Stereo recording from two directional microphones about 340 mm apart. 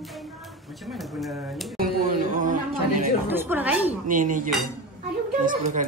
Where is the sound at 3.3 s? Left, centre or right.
Centre.